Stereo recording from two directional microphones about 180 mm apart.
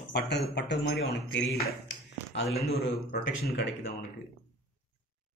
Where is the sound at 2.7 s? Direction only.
65° left (ahead or behind).